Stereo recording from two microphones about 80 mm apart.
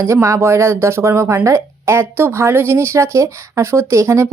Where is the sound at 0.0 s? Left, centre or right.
Right.